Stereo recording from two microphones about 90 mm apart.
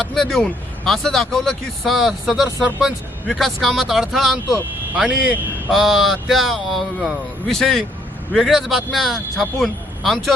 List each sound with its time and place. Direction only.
0.0 s a man's voice: 5° left (ahead or behind)
4.9 s a man's voice: 15° right (ahead or behind)
5.7 s a man's voice: centre (ahead or behind)